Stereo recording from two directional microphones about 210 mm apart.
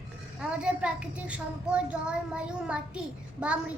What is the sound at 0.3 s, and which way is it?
A child's voice, 5° right (ahead or behind).